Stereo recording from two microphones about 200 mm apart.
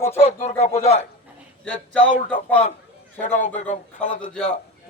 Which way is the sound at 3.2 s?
40° left (ahead or behind).